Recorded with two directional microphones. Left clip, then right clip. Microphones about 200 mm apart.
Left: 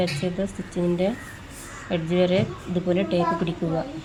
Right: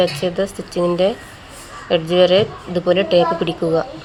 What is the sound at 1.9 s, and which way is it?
Speech, 20° right (ahead or behind).